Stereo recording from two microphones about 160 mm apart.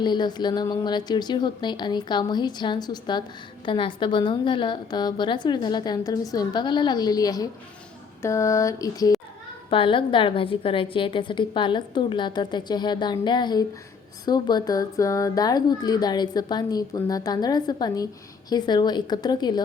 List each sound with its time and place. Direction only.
0.0 s speech: 25° left (ahead or behind)
9.6 s a woman's voice: 35° left (ahead or behind)